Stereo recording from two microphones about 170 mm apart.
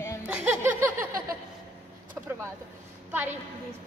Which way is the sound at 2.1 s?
15° right (ahead or behind).